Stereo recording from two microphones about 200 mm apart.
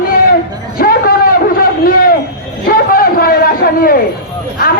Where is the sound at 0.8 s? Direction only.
45° left (ahead or behind).